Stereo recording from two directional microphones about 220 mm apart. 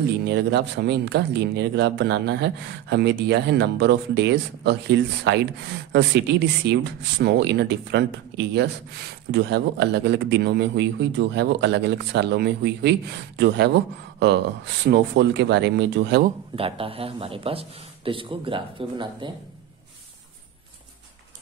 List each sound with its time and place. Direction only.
0.0 s speech: 50° right (ahead or behind)
14.2 s speech: 50° right (ahead or behind)
16.5 s a man's voice: 25° right (ahead or behind)